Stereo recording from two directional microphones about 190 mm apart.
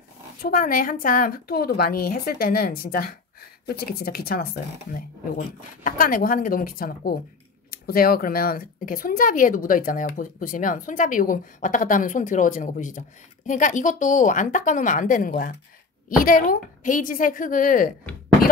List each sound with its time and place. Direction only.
0.4 s speech: 50° left (ahead or behind)
5.9 s speech: 45° left (ahead or behind)